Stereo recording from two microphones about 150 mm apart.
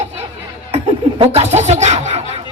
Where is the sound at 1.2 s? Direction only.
45° right (ahead or behind).